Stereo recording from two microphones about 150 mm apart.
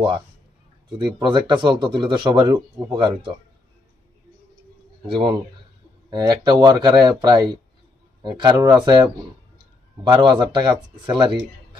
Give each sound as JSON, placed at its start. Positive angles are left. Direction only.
{"t": 0.9, "sound": "speech", "side_deg": -30}
{"t": 2.8, "sound": "speech", "side_deg": -20}
{"t": 5.0, "sound": "speech", "side_deg": -35}
{"t": 10.0, "sound": "speech", "side_deg": -30}